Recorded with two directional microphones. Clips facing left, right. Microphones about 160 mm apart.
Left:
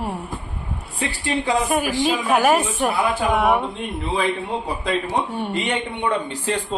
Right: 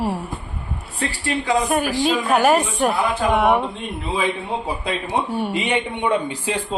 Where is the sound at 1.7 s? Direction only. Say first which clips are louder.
Right 1 dB; centre (ahead or behind).